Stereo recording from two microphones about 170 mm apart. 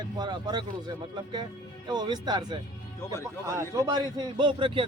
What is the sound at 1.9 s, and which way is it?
Speech, 25° right (ahead or behind).